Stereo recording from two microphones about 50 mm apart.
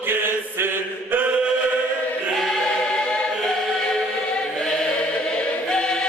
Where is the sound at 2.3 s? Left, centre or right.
Centre.